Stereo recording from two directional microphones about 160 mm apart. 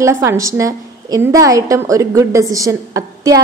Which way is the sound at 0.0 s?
15° right (ahead or behind).